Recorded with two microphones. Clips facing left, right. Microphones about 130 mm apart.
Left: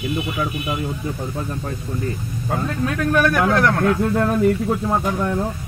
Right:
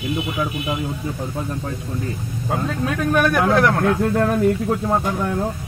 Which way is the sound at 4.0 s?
Centre (ahead or behind).